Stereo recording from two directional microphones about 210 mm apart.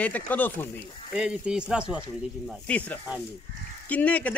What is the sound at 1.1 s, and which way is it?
Speech, 5° right (ahead or behind).